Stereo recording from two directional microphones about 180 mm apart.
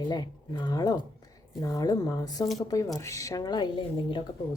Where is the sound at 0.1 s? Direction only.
25° left (ahead or behind).